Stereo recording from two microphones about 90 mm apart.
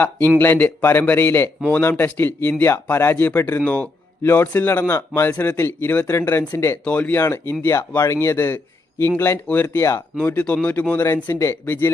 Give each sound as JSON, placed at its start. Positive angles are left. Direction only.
{"t": 0.3, "sound": "speech", "side_deg": 20}
{"t": 6.8, "sound": "speech", "side_deg": 15}
{"t": 7.2, "sound": "speech", "side_deg": 30}
{"t": 10.2, "sound": "speech", "side_deg": 15}